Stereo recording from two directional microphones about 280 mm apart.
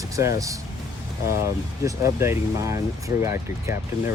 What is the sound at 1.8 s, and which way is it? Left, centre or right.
Speech, centre.